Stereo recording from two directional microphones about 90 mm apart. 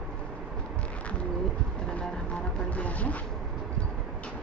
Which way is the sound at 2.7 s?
15° left (ahead or behind).